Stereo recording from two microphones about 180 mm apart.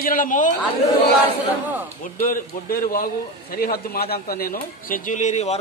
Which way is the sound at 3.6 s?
55° left (ahead or behind).